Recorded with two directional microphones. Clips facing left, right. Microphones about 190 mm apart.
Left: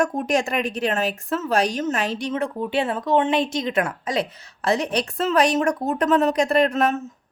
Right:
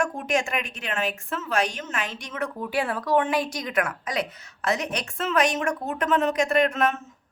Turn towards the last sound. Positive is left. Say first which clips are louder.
# left 3 dB
turn(degrees=35)  # may be behind; listen again after turning